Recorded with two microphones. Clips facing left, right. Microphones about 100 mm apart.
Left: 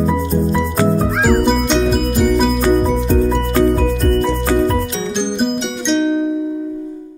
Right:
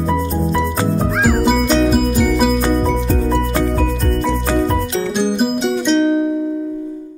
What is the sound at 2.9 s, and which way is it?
Music, 5° left (ahead or behind).